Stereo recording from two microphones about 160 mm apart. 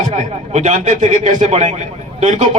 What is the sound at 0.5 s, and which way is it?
A man's voice, 45° right (ahead or behind).